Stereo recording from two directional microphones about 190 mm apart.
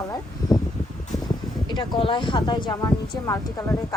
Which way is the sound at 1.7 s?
25° left (ahead or behind).